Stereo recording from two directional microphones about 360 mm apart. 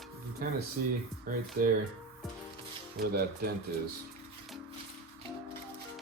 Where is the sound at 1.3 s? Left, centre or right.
Right.